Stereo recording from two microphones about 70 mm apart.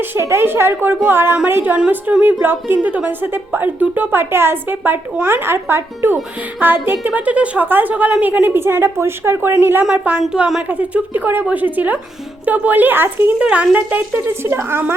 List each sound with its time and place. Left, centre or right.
0.0 s a woman's voice: right
8.6 s a woman's voice: right
10.2 s a woman's voice: centre
10.7 s a woman's voice: right